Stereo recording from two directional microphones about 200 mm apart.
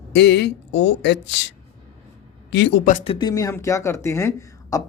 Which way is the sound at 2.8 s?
40° left (ahead or behind).